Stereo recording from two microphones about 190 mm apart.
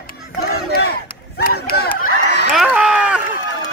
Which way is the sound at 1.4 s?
55° left (ahead or behind).